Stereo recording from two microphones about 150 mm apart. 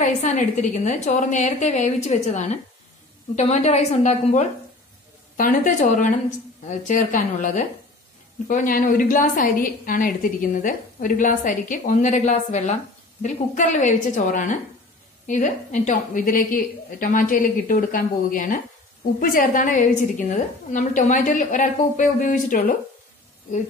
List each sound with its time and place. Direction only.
0.0 s a woman's voice: 55° left (ahead or behind)
5.4 s a woman's voice: 65° left (ahead or behind)